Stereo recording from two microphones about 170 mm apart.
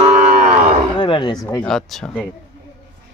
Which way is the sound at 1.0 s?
25° left (ahead or behind).